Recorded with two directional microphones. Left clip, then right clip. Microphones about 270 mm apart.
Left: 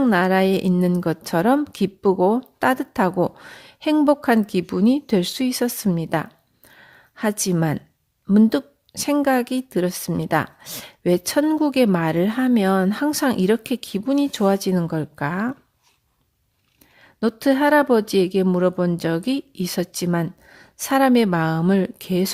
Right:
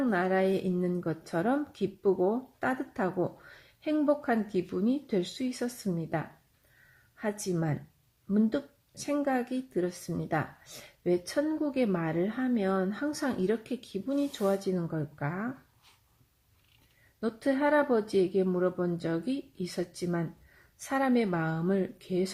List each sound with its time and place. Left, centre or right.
0.0 s a woman's voice: left
17.2 s a woman's voice: left